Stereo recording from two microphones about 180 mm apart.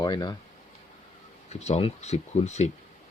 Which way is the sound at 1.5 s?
35° left (ahead or behind).